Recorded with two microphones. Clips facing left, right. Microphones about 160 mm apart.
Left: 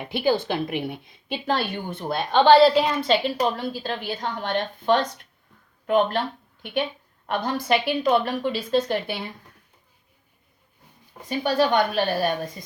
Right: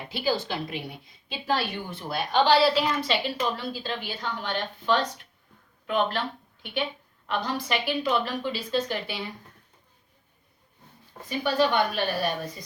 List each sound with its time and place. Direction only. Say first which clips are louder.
0.0 s a woman's voice: left 5 dB; 60° left (ahead or behind)
11.3 s a woman's voice: left 3 dB; 40° left (ahead or behind)